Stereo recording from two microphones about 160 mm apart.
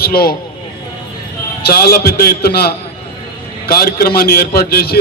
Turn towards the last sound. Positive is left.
turn(degrees=75)  # may be behind; listen again after turning